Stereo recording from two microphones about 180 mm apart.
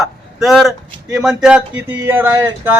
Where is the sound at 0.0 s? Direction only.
Centre (ahead or behind).